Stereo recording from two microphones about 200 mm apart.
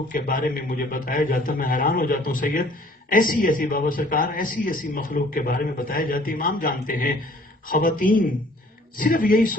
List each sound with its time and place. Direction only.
0.1 s a man's voice: 45° left (ahead or behind)